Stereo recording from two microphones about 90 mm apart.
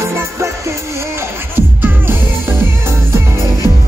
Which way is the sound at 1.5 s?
25° right (ahead or behind).